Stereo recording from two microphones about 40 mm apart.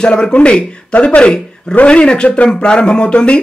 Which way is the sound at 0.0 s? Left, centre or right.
Left.